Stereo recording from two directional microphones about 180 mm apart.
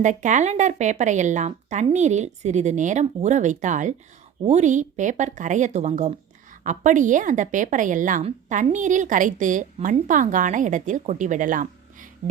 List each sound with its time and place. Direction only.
0.0 s speech: 40° right (ahead or behind)